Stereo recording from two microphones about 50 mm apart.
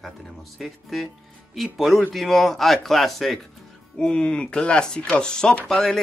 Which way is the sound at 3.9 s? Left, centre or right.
Centre.